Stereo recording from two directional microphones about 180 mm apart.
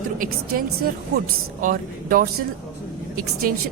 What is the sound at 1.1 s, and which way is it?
Speech, 65° right (ahead or behind).